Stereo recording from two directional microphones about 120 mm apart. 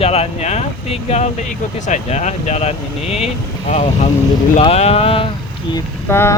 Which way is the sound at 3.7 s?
75° left (ahead or behind).